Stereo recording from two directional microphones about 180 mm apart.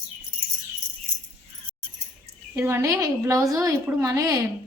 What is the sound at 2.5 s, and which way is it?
A woman's voice, 15° right (ahead or behind).